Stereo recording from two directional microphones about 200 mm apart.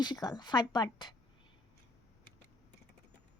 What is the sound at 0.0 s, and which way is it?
A woman's voice, 20° left (ahead or behind).